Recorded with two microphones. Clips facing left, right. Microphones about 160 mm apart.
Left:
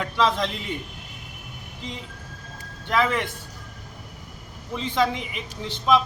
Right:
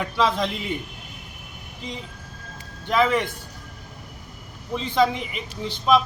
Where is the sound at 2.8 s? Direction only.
15° right (ahead or behind).